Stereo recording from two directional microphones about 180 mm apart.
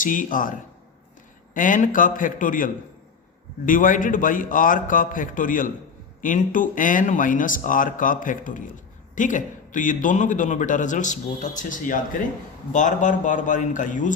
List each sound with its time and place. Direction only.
0.0 s speech: 50° left (ahead or behind)
1.5 s speech: 50° left (ahead or behind)